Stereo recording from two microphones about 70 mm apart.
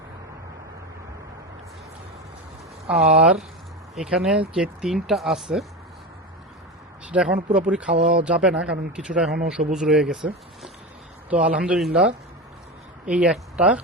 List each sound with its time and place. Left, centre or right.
2.9 s speech: centre
7.1 s speech: centre
11.3 s a man's voice: centre